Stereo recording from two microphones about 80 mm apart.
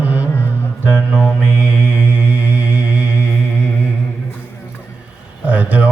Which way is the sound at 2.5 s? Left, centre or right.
Centre.